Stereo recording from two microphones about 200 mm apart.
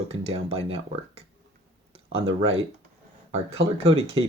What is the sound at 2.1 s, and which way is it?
Speech, 30° right (ahead or behind).